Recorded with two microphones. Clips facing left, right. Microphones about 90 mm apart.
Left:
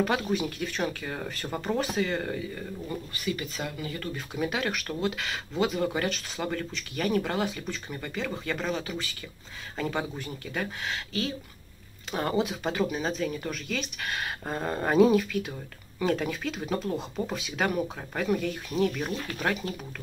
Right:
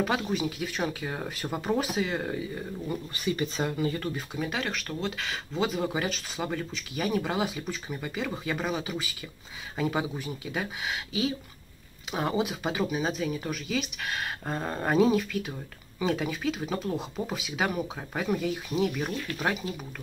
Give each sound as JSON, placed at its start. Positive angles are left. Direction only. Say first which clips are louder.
{"t": 0.0, "sound": "speech", "louder": "left 1 dB", "side_deg": 0}
{"t": 3.3, "sound": "speech", "louder": "right 4 dB", "side_deg": -30}
{"t": 4.4, "sound": "speech", "louder": "left 4 dB", "side_deg": 5}